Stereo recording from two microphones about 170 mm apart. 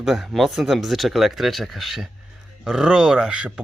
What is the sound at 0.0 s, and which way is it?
Speech, centre (ahead or behind).